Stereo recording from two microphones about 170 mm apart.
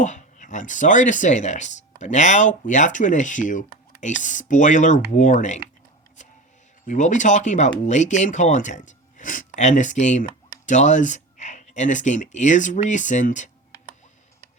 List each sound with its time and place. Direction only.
0.0 s speech: 45° left (ahead or behind)
6.2 s music: 45° left (ahead or behind)
6.8 s speech: 45° left (ahead or behind)